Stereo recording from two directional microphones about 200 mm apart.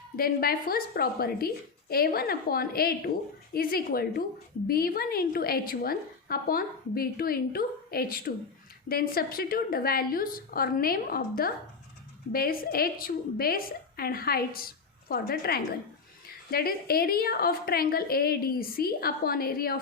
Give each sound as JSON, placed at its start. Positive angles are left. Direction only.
{"t": 0.2, "sound": "a woman's voice", "side_deg": 45}